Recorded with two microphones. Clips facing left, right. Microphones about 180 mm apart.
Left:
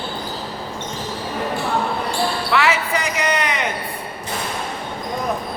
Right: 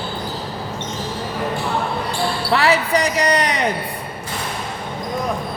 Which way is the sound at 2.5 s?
35° right (ahead or behind).